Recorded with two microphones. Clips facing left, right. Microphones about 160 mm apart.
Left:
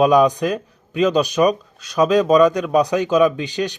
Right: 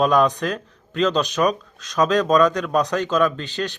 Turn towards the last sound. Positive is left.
turn(degrees=10)  # may be behind; listen again after turning